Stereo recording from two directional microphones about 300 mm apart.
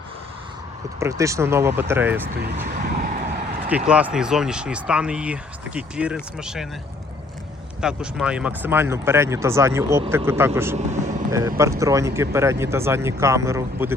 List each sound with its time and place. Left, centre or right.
0.9 s speech: centre
2.6 s vehicle: right
3.7 s speech: centre
7.8 s speech: centre
10.8 s vehicle: right
11.3 s speech: centre